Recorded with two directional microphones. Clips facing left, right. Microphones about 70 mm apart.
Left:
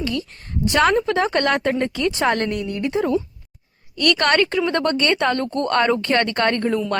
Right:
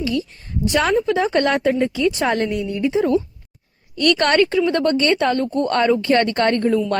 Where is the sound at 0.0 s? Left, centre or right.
Left.